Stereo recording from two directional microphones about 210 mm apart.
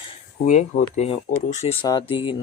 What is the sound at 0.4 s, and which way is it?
Speech, 35° left (ahead or behind).